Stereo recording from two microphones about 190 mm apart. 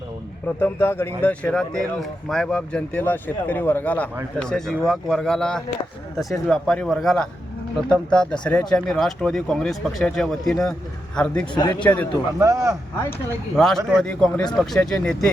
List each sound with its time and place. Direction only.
0.4 s speech: 10° left (ahead or behind)
11.5 s a man's voice: 20° left (ahead or behind)
11.8 s speech: 10° left (ahead or behind)
12.4 s speech: 15° right (ahead or behind)
13.6 s speech: centre (ahead or behind)